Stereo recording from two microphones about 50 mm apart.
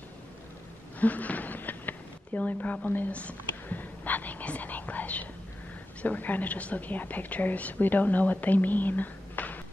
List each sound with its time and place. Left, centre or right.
0.9 s a sound: left
3.1 s whispering: left
6.0 s a woman's voice: left